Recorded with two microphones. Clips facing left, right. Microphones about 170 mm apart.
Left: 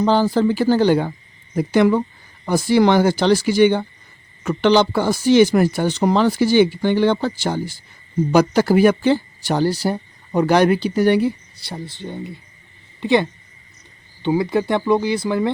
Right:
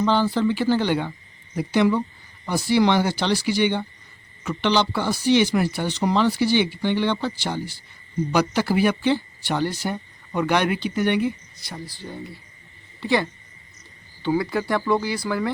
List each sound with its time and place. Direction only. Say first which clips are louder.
0.0 s a woman's voice: left 4 dB; 40° left (ahead or behind); by 15.4 s 20° left (ahead or behind)